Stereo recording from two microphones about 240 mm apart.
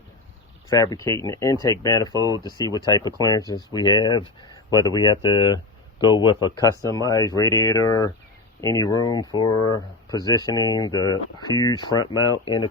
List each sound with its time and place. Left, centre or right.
0.7 s speech: centre